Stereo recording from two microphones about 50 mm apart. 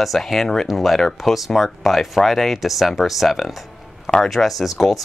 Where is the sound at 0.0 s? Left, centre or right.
Centre.